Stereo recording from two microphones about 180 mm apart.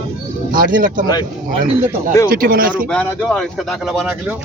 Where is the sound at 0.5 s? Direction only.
50° right (ahead or behind).